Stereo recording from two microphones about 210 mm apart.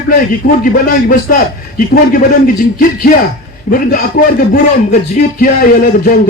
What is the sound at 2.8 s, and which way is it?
A man's voice, 40° left (ahead or behind).